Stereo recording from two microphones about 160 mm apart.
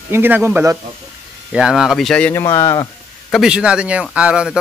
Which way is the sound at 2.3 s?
20° left (ahead or behind).